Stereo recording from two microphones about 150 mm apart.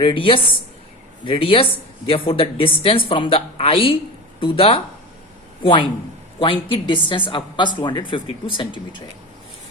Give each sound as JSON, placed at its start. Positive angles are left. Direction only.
{"t": 0.0, "sound": "speech", "side_deg": 35}